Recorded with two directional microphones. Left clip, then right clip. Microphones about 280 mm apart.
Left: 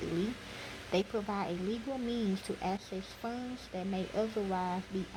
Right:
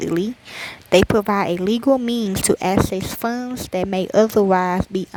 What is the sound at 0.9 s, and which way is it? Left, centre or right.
A woman's voice, right.